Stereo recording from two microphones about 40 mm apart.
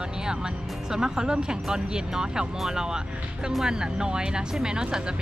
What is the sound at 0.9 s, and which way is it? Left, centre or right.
Speech, centre.